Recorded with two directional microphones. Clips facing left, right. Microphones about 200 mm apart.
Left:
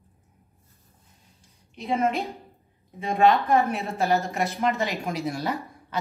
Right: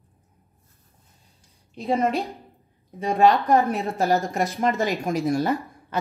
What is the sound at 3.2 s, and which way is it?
A woman's voice, centre (ahead or behind).